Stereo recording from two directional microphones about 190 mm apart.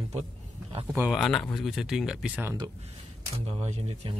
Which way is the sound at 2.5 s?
25° right (ahead or behind).